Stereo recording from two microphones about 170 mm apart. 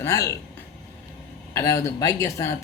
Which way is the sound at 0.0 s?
20° left (ahead or behind).